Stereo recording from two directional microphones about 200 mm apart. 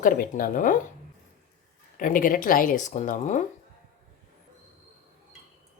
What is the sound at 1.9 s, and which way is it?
Speech, 45° left (ahead or behind).